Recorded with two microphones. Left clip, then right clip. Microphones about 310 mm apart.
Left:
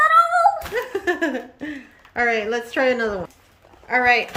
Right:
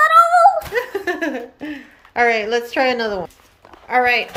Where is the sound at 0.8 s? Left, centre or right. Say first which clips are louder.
Right 1 dB; centre.